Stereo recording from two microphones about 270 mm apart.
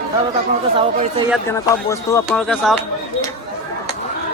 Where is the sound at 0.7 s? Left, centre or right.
Centre.